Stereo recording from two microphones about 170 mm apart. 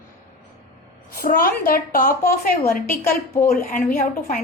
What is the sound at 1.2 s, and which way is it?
A woman's voice, 60° left (ahead or behind).